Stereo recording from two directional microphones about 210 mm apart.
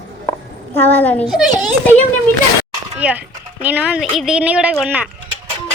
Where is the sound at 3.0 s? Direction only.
5° right (ahead or behind).